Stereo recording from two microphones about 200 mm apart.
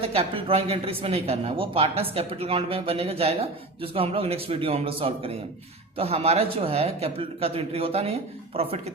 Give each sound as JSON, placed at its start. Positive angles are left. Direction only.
{"t": 0.0, "sound": "speech", "side_deg": -30}